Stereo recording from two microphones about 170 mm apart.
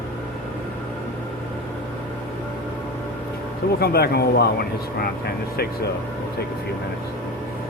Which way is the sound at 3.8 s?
70° left (ahead or behind).